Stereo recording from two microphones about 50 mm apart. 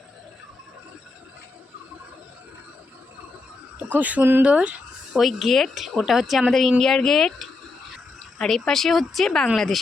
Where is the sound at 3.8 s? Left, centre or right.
Right.